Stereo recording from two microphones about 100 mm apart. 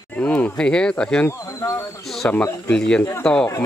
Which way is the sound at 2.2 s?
20° left (ahead or behind).